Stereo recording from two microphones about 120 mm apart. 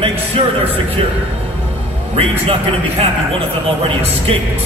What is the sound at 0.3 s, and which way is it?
Speech, 50° right (ahead or behind).